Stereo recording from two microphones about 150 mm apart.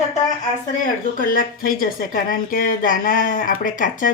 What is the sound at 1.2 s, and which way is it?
A woman's voice, 70° left (ahead or behind).